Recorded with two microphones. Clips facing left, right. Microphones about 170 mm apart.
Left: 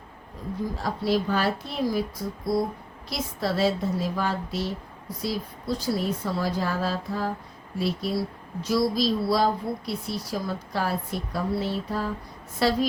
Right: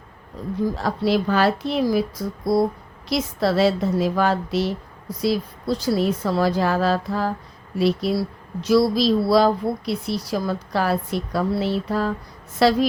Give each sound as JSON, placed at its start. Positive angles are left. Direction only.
{"t": 0.8, "sound": "speech", "side_deg": -80}